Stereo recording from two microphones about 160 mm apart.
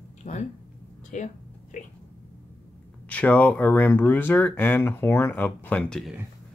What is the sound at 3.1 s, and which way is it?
Speech, 10° left (ahead or behind).